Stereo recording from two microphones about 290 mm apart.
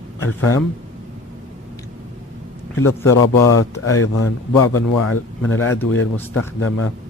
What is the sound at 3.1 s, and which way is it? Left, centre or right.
A man's voice, left.